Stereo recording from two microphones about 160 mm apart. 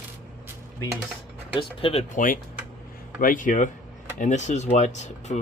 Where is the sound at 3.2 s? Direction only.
55° left (ahead or behind).